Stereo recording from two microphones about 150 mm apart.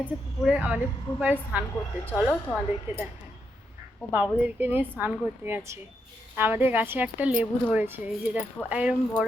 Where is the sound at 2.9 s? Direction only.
15° right (ahead or behind).